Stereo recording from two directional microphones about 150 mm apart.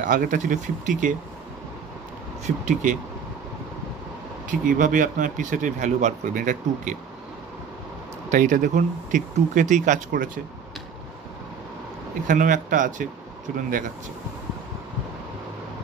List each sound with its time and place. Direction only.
0.0 s speech: 60° right (ahead or behind)
2.4 s speech: 55° right (ahead or behind)
4.5 s speech: 60° right (ahead or behind)
8.3 s speech: 55° right (ahead or behind)
12.3 s speech: 60° right (ahead or behind)